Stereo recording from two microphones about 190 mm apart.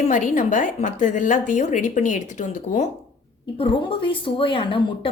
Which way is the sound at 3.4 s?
30° left (ahead or behind).